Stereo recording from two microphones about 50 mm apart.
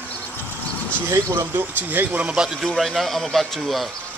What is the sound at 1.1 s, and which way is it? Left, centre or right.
Speech, right.